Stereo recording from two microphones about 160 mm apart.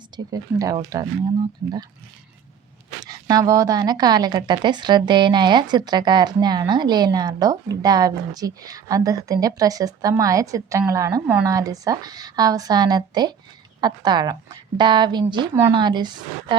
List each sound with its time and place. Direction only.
0.3 s a woman's voice: 20° right (ahead or behind)
3.0 s a woman's voice: 25° right (ahead or behind)